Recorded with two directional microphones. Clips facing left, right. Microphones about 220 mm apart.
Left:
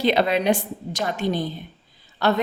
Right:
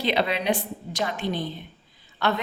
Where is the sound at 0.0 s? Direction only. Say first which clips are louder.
Left 5 dB; 45° left (ahead or behind).